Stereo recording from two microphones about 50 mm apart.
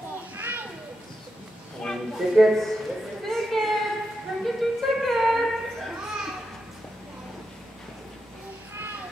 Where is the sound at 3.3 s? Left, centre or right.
Centre.